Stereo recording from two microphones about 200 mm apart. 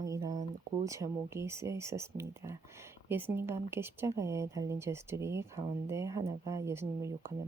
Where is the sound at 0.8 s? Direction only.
15° right (ahead or behind).